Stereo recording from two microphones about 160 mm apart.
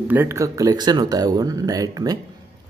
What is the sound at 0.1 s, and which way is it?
Speech, 15° right (ahead or behind).